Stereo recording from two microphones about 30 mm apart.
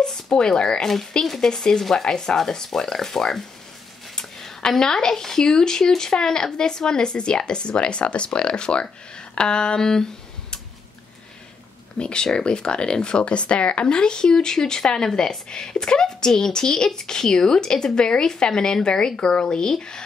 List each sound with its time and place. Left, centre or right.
0.0 s speech: left
4.2 s a sound: centre
4.6 s speech: centre
5.5 s speech: left
9.3 s a sound: left
9.8 s speech: centre
12.0 s speech: left